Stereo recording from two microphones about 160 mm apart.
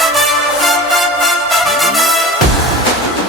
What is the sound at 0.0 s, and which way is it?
Music, centre (ahead or behind).